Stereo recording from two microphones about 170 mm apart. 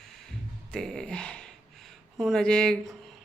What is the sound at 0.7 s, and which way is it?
Music, 5° left (ahead or behind).